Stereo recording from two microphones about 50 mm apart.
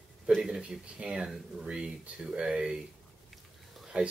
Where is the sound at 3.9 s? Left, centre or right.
Right.